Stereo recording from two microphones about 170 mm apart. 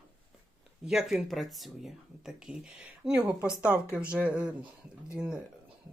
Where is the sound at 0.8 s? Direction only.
5° right (ahead or behind).